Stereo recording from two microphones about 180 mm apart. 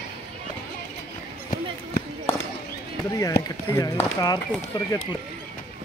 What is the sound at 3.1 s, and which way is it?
Speech, 20° left (ahead or behind).